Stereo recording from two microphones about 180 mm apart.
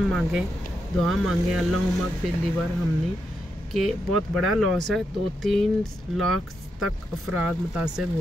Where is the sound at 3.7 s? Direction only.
Centre (ahead or behind).